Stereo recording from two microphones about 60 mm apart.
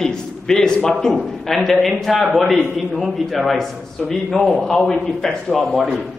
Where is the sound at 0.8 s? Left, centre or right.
Centre.